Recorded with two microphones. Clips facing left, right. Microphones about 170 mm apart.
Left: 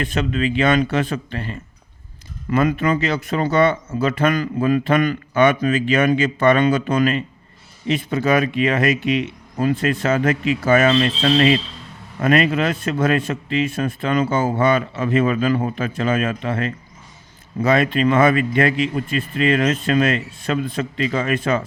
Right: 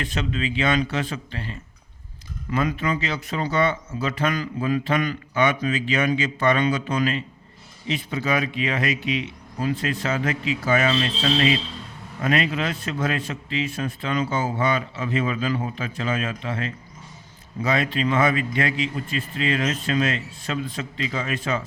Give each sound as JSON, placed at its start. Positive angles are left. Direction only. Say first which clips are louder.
{"t": 0.0, "sound": "speech", "louder": "left 6 dB", "side_deg": 55}